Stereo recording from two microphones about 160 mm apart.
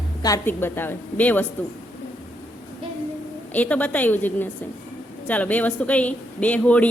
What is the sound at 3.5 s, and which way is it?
A woman's voice, 10° left (ahead or behind).